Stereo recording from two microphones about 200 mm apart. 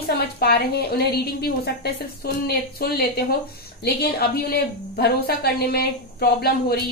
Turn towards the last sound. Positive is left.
turn(degrees=50)  # may be behind; listen again after turning